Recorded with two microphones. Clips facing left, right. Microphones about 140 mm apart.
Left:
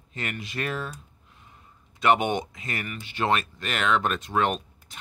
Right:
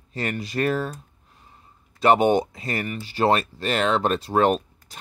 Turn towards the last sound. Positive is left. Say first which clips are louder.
# right 7 dB
turn(degrees=-35)  # may be behind; listen again after turning